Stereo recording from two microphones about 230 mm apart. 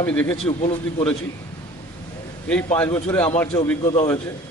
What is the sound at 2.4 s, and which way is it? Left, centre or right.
A man's voice, centre.